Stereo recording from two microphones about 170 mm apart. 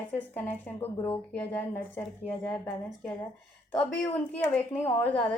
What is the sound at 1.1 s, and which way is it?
A woman's voice, 10° left (ahead or behind).